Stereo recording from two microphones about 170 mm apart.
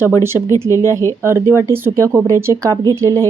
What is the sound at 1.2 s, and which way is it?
A woman's voice, 15° right (ahead or behind).